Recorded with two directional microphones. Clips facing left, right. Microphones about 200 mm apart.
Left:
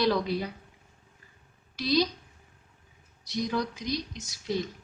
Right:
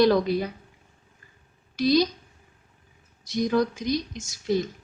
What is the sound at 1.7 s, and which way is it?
Speech, 45° right (ahead or behind).